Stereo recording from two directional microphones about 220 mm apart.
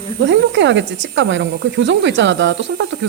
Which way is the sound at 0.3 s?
55° right (ahead or behind).